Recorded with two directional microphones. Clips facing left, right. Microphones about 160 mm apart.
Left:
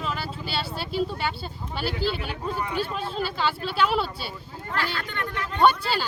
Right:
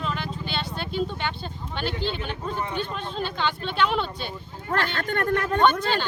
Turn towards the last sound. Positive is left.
turn(degrees=5)  # may be behind; listen again after turning